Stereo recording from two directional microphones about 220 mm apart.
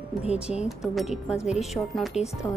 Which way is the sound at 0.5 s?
Centre (ahead or behind).